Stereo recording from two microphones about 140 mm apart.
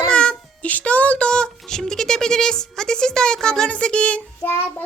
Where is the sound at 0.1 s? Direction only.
5° left (ahead or behind).